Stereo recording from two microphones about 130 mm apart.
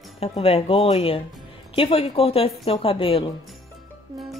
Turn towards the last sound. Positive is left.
turn(degrees=45)  # may be behind; listen again after turning